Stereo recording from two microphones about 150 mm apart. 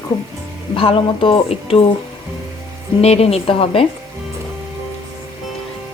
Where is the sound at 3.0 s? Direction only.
45° left (ahead or behind).